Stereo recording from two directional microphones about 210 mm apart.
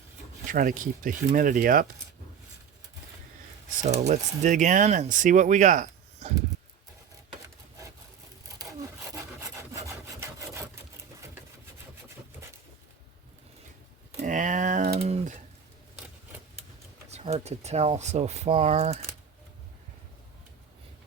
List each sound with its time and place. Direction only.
0.4 s speech: 40° right (ahead or behind)
3.8 s speech: 30° right (ahead or behind)
9.8 s rub: 15° right (ahead or behind)
14.2 s typing: 35° right (ahead or behind)
14.9 s a sound: 30° right (ahead or behind)
17.1 s speech: 30° right (ahead or behind)